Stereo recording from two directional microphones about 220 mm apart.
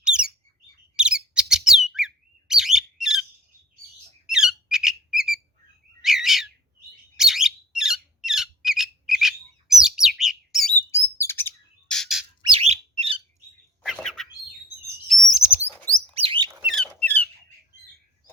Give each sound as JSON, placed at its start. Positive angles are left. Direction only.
{"t": 0.0, "sound": "bird", "side_deg": -5}
{"t": 4.3, "sound": "squeak", "side_deg": 0}
{"t": 6.0, "sound": "bird", "side_deg": 0}
{"t": 7.2, "sound": "a sound", "side_deg": 0}
{"t": 10.9, "sound": "bird", "side_deg": 10}
{"t": 12.4, "sound": "bird", "side_deg": -30}
{"t": 13.8, "sound": "bird", "side_deg": 0}
{"t": 15.3, "sound": "chirp", "side_deg": -5}
{"t": 15.6, "sound": "chirp", "side_deg": 10}
{"t": 16.1, "sound": "bird", "side_deg": -25}
{"t": 16.6, "sound": "squeak", "side_deg": 0}